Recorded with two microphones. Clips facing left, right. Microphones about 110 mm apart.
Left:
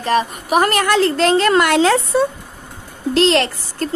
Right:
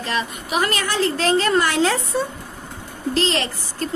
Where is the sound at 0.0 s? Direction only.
50° left (ahead or behind).